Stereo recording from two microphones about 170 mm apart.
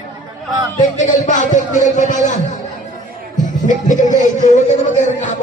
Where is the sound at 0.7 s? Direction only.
45° left (ahead or behind).